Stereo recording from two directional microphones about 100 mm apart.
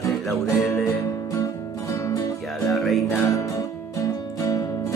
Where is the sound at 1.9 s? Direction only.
35° left (ahead or behind).